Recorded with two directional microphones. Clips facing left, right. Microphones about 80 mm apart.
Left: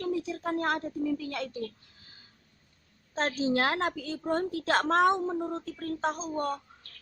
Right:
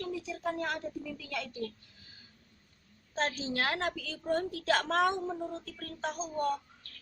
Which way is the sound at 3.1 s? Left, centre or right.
Left.